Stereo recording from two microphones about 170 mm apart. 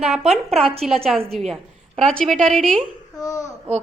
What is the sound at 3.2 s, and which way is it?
Speech, 20° left (ahead or behind).